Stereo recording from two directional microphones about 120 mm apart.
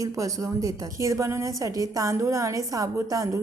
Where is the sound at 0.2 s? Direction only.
30° right (ahead or behind).